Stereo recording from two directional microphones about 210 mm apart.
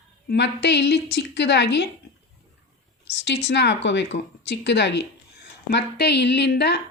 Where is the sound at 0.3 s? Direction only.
55° left (ahead or behind).